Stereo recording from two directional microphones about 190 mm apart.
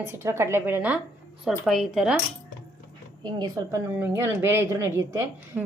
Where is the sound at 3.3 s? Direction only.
20° right (ahead or behind).